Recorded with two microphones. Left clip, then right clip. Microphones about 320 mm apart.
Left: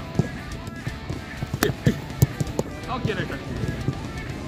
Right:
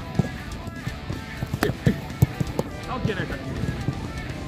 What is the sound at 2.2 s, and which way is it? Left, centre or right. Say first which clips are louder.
Clip-clop: left 1 dB; left.